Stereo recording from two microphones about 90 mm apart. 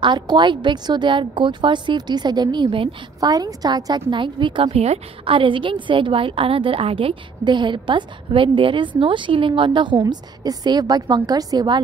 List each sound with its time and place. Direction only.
0.0 s a woman's voice: 60° right (ahead or behind)
3.2 s a woman's voice: 45° right (ahead or behind)
4.1 s a woman's voice: 65° right (ahead or behind)
10.0 s a woman's voice: 50° right (ahead or behind)